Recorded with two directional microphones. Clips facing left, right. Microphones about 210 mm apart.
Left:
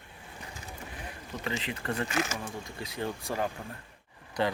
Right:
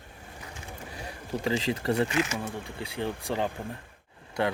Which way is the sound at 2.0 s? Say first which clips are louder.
Right 3 dB; 40° left (ahead or behind).